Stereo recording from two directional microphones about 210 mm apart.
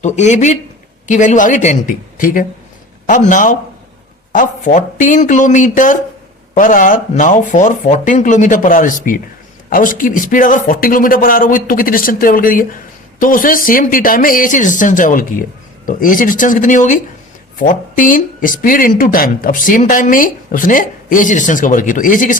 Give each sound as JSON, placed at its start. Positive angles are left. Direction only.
{"t": 0.0, "sound": "speech", "side_deg": 35}